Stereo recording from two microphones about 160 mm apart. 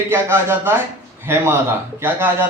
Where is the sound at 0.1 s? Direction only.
15° right (ahead or behind).